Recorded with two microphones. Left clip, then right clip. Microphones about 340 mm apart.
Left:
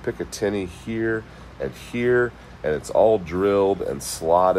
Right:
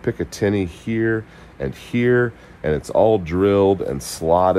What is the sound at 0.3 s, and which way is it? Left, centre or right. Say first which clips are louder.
Speech: right 4 dB; right.